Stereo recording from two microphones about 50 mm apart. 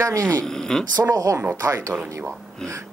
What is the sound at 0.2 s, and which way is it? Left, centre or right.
Speech, left.